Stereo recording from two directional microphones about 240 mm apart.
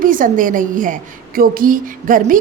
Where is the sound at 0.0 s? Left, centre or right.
Right.